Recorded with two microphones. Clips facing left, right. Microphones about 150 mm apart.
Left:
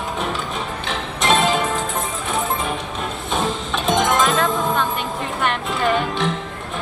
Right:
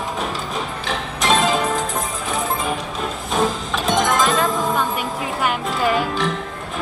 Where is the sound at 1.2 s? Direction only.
Centre (ahead or behind).